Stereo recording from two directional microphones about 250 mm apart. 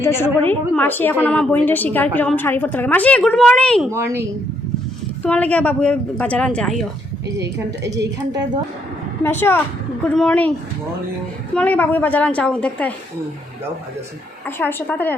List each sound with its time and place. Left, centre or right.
0.0 s a woman's voice: centre
3.9 s a woman's voice: centre
5.2 s a woman's voice: centre
8.2 s a woman's voice: centre
9.2 s a woman's voice: centre
11.5 s a woman's voice: centre
14.4 s a woman's voice: centre